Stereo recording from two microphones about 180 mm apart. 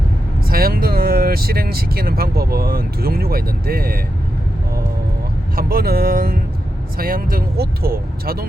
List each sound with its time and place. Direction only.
0.4 s speech: 55° right (ahead or behind)
5.5 s speech: 55° right (ahead or behind)